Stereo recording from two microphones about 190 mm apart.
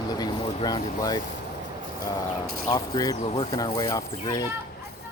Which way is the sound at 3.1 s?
30° left (ahead or behind).